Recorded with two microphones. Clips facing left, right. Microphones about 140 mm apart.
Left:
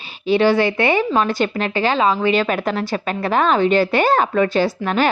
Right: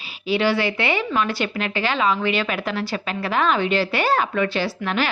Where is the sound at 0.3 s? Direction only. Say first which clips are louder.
Left 5 dB; 45° left (ahead or behind).